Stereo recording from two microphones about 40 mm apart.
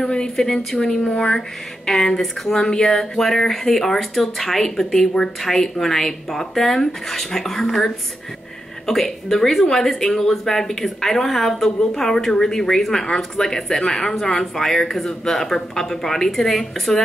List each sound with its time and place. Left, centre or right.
0.0 s a woman's voice: centre